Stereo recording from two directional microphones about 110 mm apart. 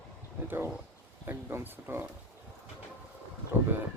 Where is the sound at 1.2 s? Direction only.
20° right (ahead or behind).